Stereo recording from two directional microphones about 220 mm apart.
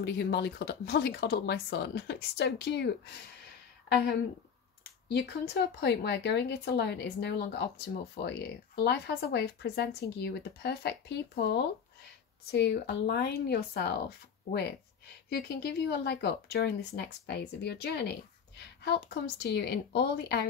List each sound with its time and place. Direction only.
0.0 s speech: 50° left (ahead or behind)
5.0 s speech: 50° left (ahead or behind)
15.2 s speech: 50° left (ahead or behind)